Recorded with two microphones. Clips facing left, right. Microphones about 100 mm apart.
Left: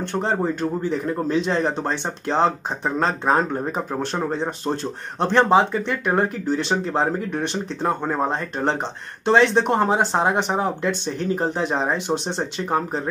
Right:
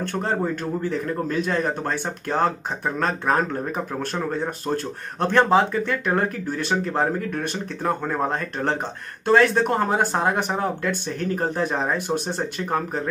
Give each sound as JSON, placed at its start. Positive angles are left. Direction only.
{"t": 0.0, "sound": "speech", "side_deg": 20}